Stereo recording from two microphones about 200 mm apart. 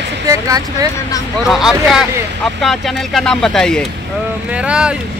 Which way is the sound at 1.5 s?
Centre (ahead or behind).